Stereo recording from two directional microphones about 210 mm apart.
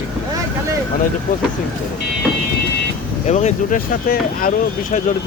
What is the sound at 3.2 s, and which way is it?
Speech, 35° left (ahead or behind).